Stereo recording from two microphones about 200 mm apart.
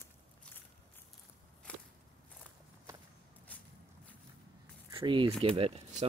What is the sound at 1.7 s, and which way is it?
Walk, 5° left (ahead or behind).